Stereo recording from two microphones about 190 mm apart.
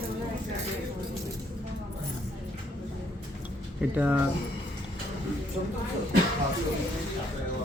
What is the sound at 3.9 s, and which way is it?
Speech, 10° right (ahead or behind).